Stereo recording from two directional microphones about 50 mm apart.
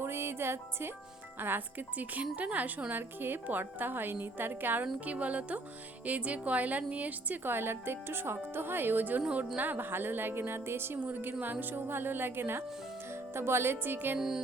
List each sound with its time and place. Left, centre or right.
0.0 s speech: right
1.4 s a woman's voice: right
7.4 s a woman's voice: right
14.2 s music: centre